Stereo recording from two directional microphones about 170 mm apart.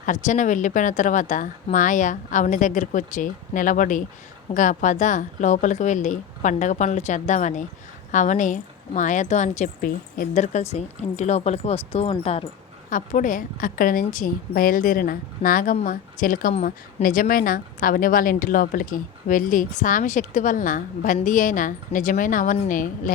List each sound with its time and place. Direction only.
0.0 s a woman's voice: 45° left (ahead or behind)
12.9 s a woman's voice: 50° left (ahead or behind)